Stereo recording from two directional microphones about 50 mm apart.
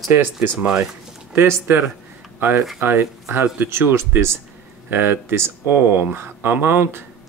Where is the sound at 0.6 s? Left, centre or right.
Centre.